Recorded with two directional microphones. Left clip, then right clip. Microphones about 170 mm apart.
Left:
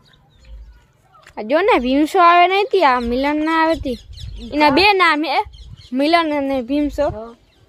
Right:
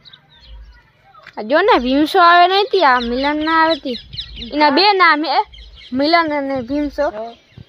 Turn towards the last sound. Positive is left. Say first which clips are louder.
# even
turn(degrees=15)  # may be behind; listen again after turning